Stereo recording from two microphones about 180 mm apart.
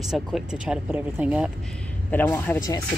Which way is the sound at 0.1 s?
5° right (ahead or behind).